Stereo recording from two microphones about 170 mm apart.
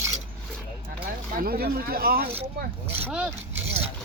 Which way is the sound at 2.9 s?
10° right (ahead or behind).